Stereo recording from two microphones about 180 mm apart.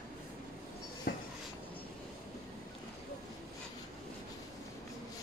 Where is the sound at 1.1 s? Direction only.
60° left (ahead or behind).